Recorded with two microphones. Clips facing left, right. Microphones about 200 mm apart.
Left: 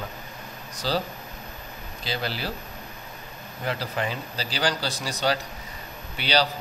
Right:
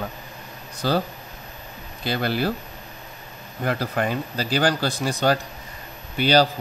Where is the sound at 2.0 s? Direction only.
55° right (ahead or behind).